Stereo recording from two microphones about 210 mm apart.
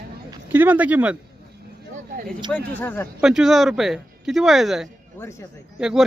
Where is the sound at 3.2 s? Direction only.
Centre (ahead or behind).